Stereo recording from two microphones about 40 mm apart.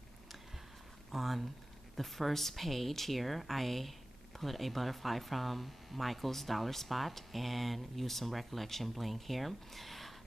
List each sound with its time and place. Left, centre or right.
1.1 s a woman's voice: centre